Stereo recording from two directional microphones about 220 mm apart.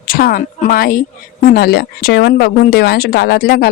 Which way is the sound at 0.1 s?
40° left (ahead or behind).